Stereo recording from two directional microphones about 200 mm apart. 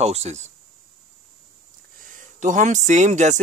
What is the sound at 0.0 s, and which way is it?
Speech, 30° right (ahead or behind).